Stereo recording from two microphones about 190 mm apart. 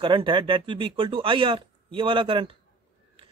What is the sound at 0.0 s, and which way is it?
A man's voice, 25° right (ahead or behind).